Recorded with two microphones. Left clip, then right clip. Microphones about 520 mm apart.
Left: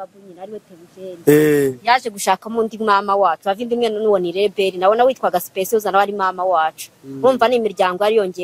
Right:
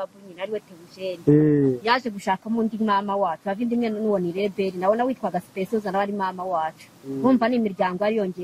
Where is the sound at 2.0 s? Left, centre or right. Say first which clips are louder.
Left 7 dB; left.